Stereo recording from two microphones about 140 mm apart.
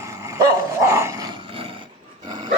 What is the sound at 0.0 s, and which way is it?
Dog, 20° right (ahead or behind).